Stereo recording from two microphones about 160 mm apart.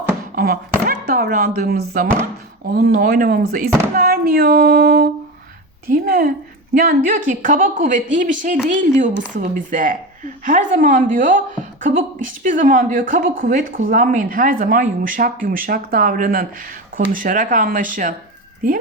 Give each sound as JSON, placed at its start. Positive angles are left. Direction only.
{"t": 0.3, "sound": "speech", "side_deg": -65}
{"t": 2.6, "sound": "a sound", "side_deg": -70}
{"t": 6.7, "sound": "a woman's voice", "side_deg": -60}